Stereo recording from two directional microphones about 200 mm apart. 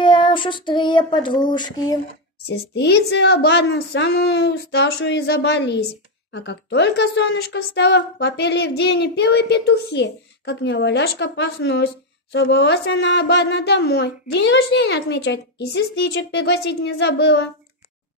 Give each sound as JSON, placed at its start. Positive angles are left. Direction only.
{"t": 0.0, "sound": "child singing", "side_deg": 25}
{"t": 2.4, "sound": "a woman's voice", "side_deg": 55}